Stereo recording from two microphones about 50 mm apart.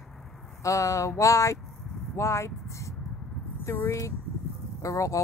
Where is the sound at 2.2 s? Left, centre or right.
Left.